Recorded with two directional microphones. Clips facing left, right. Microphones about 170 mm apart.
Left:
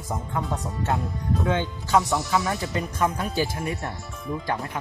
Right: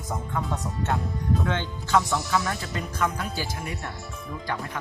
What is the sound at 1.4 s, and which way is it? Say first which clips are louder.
Speech: left 3 dB; 15° left (ahead or behind).